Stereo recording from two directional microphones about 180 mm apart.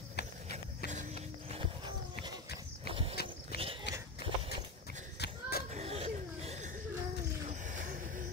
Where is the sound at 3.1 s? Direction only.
60° left (ahead or behind).